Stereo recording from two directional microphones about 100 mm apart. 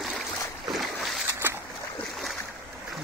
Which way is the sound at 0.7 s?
Centre (ahead or behind).